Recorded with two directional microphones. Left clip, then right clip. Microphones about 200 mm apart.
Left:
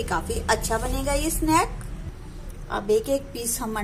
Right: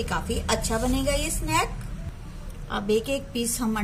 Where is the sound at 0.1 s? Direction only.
15° left (ahead or behind).